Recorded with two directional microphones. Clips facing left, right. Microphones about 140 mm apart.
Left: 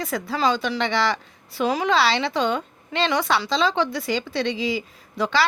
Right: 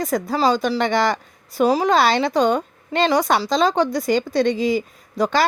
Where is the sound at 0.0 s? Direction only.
45° right (ahead or behind).